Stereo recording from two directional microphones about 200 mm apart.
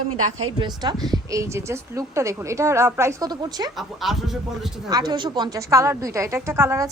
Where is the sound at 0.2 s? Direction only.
90° right.